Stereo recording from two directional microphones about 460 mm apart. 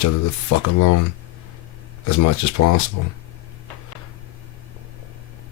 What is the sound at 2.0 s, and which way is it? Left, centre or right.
Speech, left.